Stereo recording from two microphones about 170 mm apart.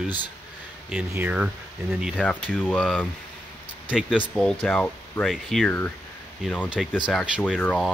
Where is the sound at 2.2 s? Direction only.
5° left (ahead or behind).